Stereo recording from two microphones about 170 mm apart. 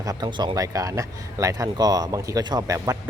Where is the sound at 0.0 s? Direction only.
20° right (ahead or behind).